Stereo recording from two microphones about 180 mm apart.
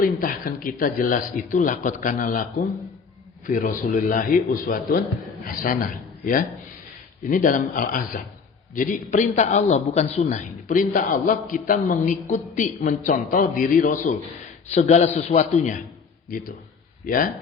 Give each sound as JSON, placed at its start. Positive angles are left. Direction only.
{"t": 0.0, "sound": "a man's voice", "side_deg": 50}
{"t": 17.1, "sound": "a man's voice", "side_deg": 50}